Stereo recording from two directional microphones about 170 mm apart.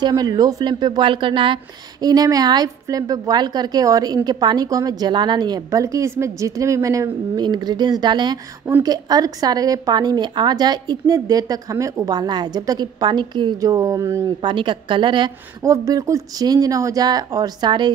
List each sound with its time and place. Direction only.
0.0 s a woman's voice: 25° right (ahead or behind)
14.5 s a woman's voice: 30° right (ahead or behind)